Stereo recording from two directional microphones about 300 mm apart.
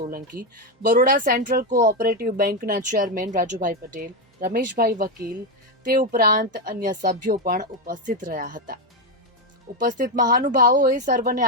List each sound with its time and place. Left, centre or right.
0.1 s speech: right